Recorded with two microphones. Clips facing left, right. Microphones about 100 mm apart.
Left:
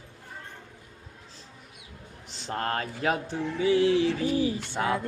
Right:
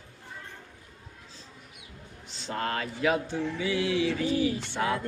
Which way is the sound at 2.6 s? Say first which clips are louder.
Even; 40° left (ahead or behind).